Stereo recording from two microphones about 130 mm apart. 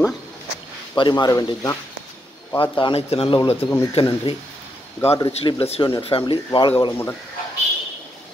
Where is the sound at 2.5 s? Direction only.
40° left (ahead or behind).